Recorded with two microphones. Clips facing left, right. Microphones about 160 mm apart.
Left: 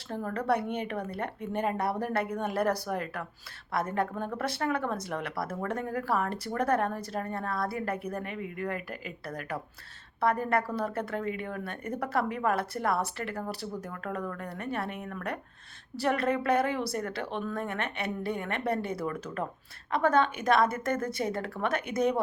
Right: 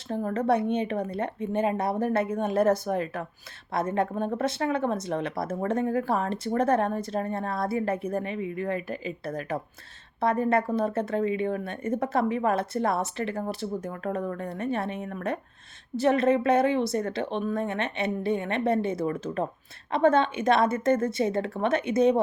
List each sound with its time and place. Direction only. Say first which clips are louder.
0.1 s speech: right 4 dB; 25° right (ahead or behind)